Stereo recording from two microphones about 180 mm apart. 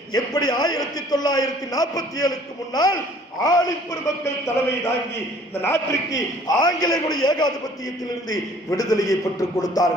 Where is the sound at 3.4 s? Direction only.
20° left (ahead or behind).